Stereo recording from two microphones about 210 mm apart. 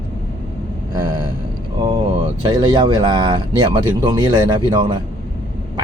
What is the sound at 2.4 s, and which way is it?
Speech, 20° right (ahead or behind).